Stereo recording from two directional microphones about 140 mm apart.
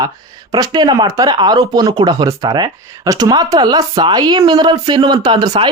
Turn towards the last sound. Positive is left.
turn(degrees=-30)  # may be behind; listen again after turning